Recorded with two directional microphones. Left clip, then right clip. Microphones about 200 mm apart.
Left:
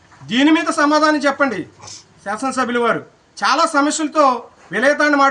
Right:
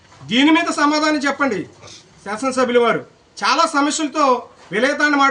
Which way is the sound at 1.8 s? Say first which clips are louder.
Left 3 dB; 55° left (ahead or behind).